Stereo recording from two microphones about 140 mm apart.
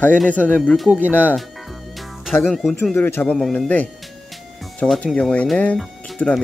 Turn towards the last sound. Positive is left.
turn(degrees=5)  # may be behind; listen again after turning